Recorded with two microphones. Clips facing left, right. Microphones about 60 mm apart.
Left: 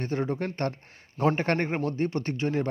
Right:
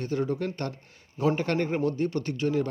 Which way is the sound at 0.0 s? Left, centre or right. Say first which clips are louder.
Right 1 dB; left.